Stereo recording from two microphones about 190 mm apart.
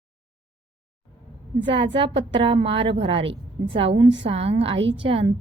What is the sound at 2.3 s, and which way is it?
A woman's voice, 25° right (ahead or behind).